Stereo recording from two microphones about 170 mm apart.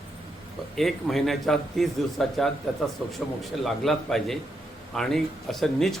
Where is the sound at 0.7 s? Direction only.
Centre (ahead or behind).